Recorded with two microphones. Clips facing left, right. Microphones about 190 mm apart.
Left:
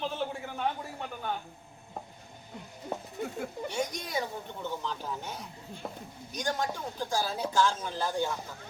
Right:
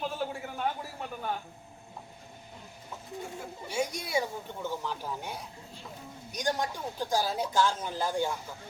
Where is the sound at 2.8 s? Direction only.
60° left (ahead or behind).